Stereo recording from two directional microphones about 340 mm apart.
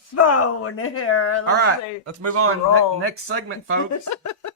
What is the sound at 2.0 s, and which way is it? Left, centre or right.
Speech, right.